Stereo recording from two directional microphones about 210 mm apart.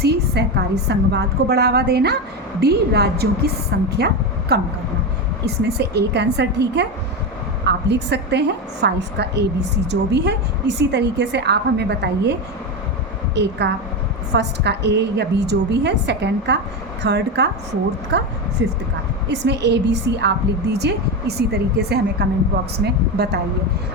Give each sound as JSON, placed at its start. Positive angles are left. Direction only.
{"t": 0.0, "sound": "a woman's voice", "side_deg": -50}
{"t": 19.3, "sound": "a woman's voice", "side_deg": -55}